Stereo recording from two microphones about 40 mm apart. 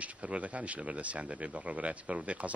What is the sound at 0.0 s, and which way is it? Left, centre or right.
Speech, right.